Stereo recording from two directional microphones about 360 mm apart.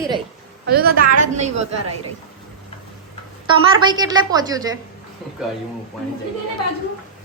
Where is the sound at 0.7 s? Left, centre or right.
Right.